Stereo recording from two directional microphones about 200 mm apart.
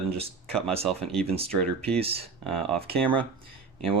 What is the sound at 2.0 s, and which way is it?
Speech, 30° right (ahead or behind).